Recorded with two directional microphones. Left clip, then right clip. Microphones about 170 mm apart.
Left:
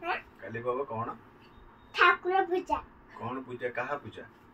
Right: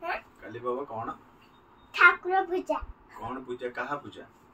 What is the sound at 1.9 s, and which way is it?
Speech, 30° right (ahead or behind).